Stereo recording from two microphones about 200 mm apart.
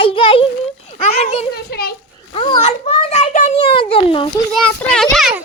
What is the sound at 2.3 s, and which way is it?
Speech, 25° left (ahead or behind).